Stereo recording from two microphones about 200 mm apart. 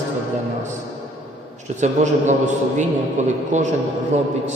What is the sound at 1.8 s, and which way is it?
A man's voice, 35° right (ahead or behind).